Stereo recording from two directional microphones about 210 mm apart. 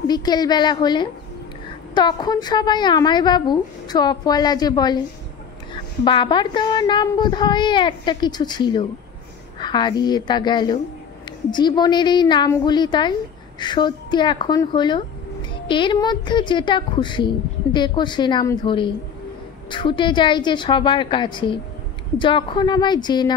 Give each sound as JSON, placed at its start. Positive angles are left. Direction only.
{"t": 0.1, "sound": "a woman's voice", "side_deg": 20}
{"t": 6.0, "sound": "a woman's voice", "side_deg": 20}